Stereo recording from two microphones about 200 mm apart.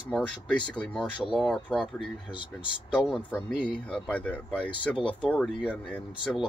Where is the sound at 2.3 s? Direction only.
25° left (ahead or behind).